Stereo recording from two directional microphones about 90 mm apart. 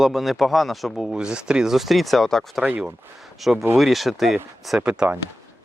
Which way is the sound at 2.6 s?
15° right (ahead or behind).